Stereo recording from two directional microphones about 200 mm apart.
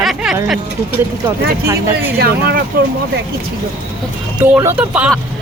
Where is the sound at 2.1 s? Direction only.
50° right (ahead or behind).